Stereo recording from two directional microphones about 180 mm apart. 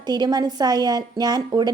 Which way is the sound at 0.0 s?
20° right (ahead or behind).